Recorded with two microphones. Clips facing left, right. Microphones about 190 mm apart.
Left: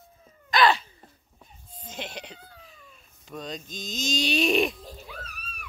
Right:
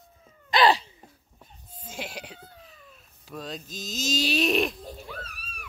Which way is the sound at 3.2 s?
Centre (ahead or behind).